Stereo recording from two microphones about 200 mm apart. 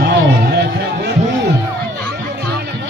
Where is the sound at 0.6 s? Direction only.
55° right (ahead or behind).